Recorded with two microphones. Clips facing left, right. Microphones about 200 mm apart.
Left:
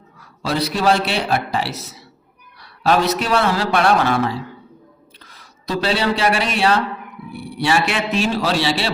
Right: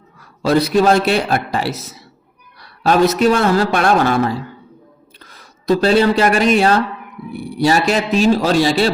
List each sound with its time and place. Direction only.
0.4 s a man's voice: 50° right (ahead or behind)
2.8 s a man's voice: 45° right (ahead or behind)